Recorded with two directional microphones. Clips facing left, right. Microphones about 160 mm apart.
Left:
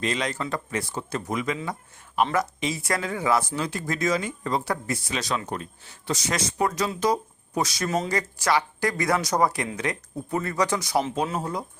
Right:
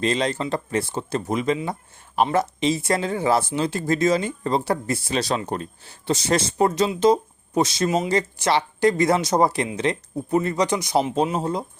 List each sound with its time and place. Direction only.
0.0 s speech: 30° right (ahead or behind)
7.9 s speech: 15° right (ahead or behind)
8.1 s speech: 25° right (ahead or behind)